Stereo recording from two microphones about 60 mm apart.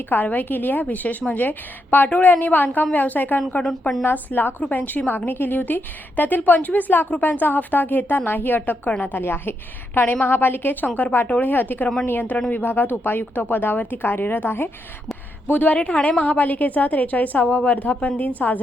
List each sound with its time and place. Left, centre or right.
0.1 s a woman's voice: left
9.2 s a woman's voice: left